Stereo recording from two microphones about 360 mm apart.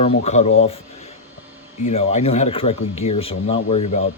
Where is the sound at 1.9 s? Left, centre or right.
Centre.